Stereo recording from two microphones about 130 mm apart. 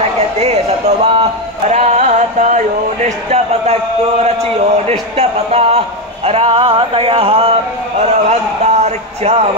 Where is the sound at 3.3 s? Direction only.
55° right (ahead or behind).